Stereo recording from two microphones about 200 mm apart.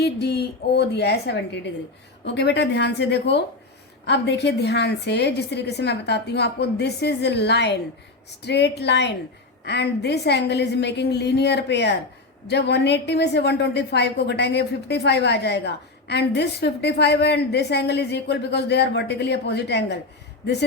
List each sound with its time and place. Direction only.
0.0 s a woman's voice: 55° left (ahead or behind)